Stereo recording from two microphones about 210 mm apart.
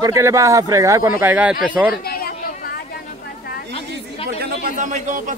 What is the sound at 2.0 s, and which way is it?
Chatter, 45° left (ahead or behind).